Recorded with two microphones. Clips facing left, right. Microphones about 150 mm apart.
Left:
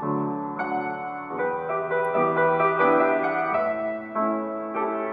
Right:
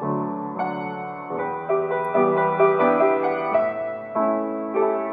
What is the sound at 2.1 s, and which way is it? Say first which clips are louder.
Music: right 3 dB; 30° right (ahead or behind).